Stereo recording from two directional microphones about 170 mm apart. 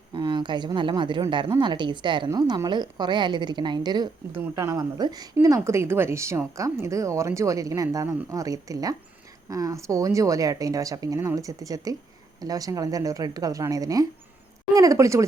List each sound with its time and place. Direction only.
0.1 s speech: 25° right (ahead or behind)